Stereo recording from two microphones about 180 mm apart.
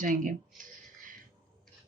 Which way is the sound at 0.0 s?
45° right (ahead or behind).